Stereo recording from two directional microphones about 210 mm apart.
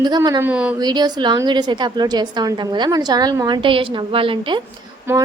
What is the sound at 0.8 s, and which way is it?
A woman's voice, 20° right (ahead or behind).